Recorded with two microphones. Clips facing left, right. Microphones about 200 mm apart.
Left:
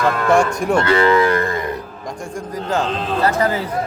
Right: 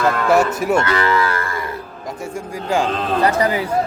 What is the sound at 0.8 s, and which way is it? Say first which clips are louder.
Moo: left 4 dB; 25° left (ahead or behind).